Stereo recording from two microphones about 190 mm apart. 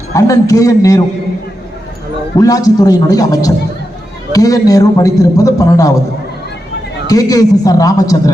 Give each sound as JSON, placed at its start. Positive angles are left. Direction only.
{"t": 0.1, "sound": "a man's voice", "side_deg": 15}
{"t": 2.4, "sound": "a man's voice", "side_deg": 20}
{"t": 7.1, "sound": "a man's voice", "side_deg": 20}